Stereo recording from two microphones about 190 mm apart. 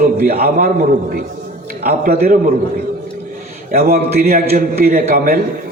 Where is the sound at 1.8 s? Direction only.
55° right (ahead or behind).